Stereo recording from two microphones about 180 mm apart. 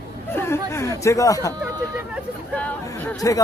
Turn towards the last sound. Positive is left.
turn(degrees=15)  # may be behind; listen again after turning